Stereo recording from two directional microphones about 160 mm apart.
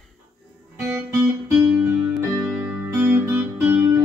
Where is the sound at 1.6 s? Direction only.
15° right (ahead or behind).